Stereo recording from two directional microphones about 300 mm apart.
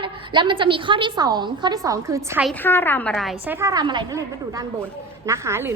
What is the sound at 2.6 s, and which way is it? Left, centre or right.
A woman's voice, centre.